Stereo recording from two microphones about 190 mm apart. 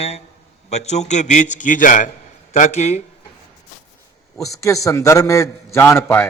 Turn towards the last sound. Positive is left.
turn(degrees=10)  # may be behind; listen again after turning